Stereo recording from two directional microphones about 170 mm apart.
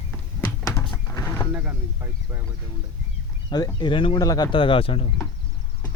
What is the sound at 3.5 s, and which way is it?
Speech, 25° left (ahead or behind).